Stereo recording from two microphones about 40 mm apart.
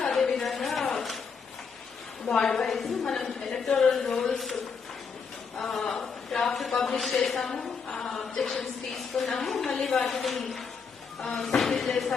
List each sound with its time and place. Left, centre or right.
0.0 s a sound: centre
0.4 s a sound: centre
2.3 s a woman's voice: centre
2.6 s a woman's voice: centre
5.5 s a woman's voice: centre
8.2 s a woman's voice: centre
11.2 s a woman's voice: centre